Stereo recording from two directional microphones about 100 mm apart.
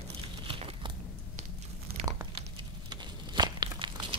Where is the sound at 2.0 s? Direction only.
85° right.